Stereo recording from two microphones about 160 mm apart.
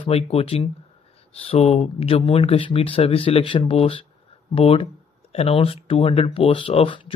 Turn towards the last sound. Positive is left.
turn(degrees=35)  # may be behind; listen again after turning